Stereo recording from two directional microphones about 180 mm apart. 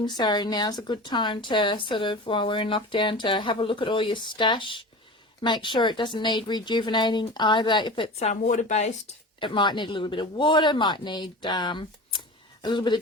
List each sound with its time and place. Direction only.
0.0 s speech: 25° left (ahead or behind)
8.3 s speech: 40° left (ahead or behind)
9.4 s speech: 25° left (ahead or behind)